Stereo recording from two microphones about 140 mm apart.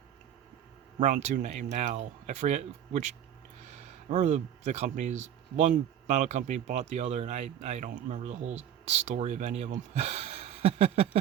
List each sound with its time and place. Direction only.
0.9 s speech: 60° right (ahead or behind)
4.1 s speech: 55° right (ahead or behind)